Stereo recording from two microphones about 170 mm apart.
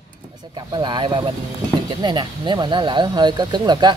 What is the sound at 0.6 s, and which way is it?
Speech, 25° right (ahead or behind).